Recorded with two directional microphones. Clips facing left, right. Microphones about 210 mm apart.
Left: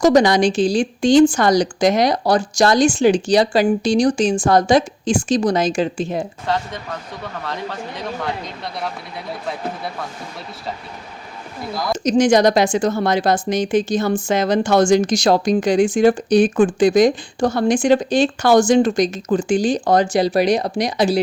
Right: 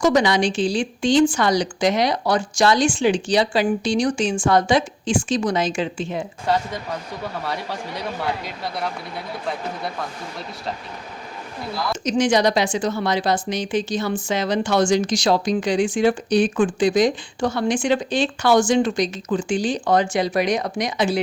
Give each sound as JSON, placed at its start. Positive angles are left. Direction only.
{"t": 0.0, "sound": "a woman's voice", "side_deg": 40}
{"t": 6.4, "sound": "speech", "side_deg": -10}
{"t": 12.0, "sound": "speech", "side_deg": 40}